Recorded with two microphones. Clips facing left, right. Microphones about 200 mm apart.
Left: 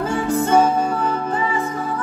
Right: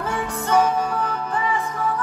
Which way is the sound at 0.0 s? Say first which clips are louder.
Left 7 dB; 25° left (ahead or behind).